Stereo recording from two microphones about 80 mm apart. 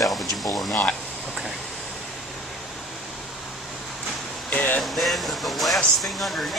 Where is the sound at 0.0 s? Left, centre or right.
Centre.